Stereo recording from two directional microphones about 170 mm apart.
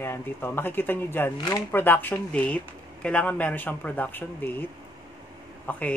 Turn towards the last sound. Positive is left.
turn(degrees=10)  # may be behind; listen again after turning